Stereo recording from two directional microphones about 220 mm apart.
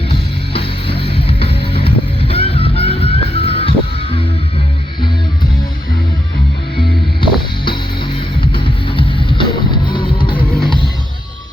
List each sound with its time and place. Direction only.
0.1 s music: 25° left (ahead or behind)
8.5 s music: 25° left (ahead or behind)